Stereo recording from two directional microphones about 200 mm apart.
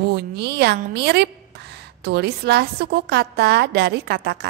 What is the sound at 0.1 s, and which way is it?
A woman's voice, 55° right (ahead or behind).